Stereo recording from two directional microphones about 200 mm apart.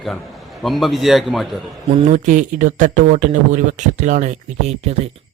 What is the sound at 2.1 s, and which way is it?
Speech, 40° right (ahead or behind).